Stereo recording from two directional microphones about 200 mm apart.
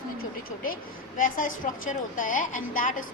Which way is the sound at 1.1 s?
40° left (ahead or behind).